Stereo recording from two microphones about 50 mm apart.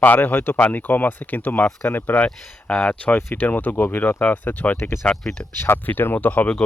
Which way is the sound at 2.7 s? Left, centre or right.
Left.